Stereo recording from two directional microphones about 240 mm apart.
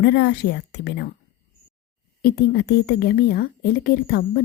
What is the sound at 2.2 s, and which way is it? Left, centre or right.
A woman's voice, left.